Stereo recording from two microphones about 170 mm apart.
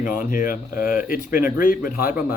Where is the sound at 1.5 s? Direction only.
55° left (ahead or behind).